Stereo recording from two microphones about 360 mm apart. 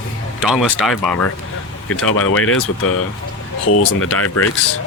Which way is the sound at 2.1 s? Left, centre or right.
Left.